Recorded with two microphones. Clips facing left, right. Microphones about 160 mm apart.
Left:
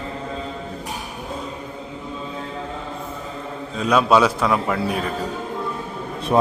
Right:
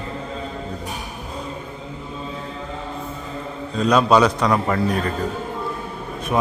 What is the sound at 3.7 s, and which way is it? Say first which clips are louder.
A man's voice: right 1 dB; 5° left (ahead or behind).